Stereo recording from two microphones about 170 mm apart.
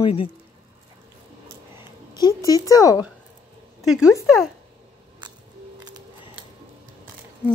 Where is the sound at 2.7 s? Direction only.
20° left (ahead or behind).